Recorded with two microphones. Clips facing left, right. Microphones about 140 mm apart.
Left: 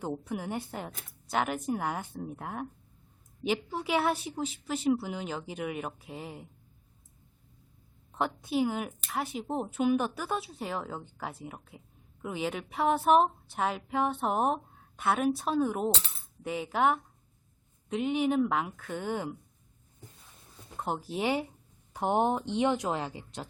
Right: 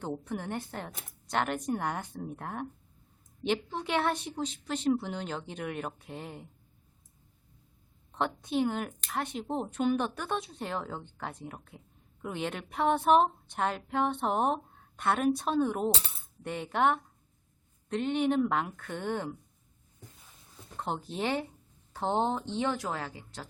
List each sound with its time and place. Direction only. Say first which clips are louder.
0.0 s speech: left 1 dB; 10° left (ahead or behind)
8.1 s speech: even; 5° left (ahead or behind)
20.7 s speech: left 1 dB; 5° left (ahead or behind)